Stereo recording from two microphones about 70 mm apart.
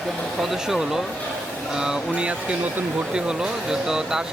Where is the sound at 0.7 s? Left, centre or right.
Centre.